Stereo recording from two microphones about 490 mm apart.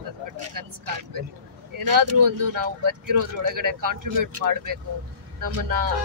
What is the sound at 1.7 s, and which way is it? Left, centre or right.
Speech, right.